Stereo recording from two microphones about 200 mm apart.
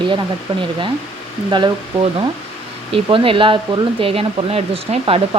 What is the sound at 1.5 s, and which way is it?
Speech, 20° right (ahead or behind).